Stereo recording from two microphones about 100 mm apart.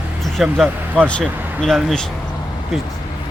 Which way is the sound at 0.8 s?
15° right (ahead or behind).